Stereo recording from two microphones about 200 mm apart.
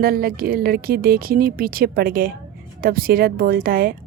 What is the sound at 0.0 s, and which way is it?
A woman's voice, 50° right (ahead or behind).